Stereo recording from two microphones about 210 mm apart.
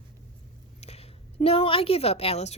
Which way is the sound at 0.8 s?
30° left (ahead or behind).